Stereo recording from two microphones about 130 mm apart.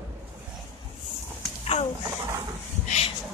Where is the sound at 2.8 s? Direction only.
60° left (ahead or behind).